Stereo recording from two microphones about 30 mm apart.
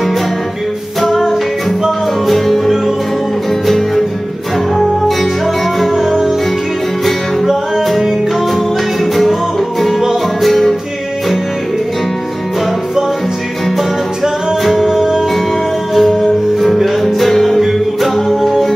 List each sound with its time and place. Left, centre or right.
1.0 s music: centre
5.9 s music: centre
7.8 s music: centre
9.8 s music: centre
14.6 s music: centre
14.9 s music: centre
15.9 s music: centre
17.6 s music: centre